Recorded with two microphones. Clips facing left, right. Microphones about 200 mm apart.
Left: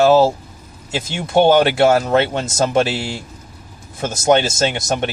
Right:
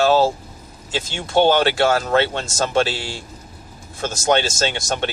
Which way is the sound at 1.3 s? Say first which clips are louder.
Left 3 dB; 10° left (ahead or behind).